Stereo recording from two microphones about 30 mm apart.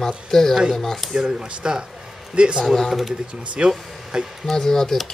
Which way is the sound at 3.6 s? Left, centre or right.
Right.